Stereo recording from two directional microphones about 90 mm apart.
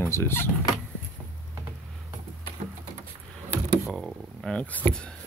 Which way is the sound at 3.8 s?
5° right (ahead or behind).